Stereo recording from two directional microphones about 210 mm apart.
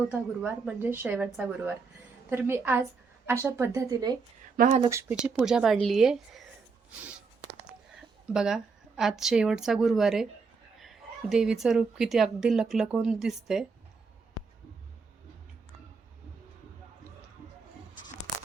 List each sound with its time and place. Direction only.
0.1 s a woman's voice: 10° right (ahead or behind)
4.5 s speech: 40° right (ahead or behind)
4.8 s a woman's voice: 15° right (ahead or behind)
8.3 s a woman's voice: 5° right (ahead or behind)